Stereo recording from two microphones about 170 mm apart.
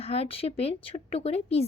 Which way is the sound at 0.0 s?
35° left (ahead or behind).